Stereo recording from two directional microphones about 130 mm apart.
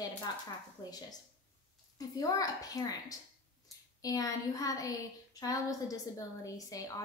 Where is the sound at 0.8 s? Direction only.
35° left (ahead or behind).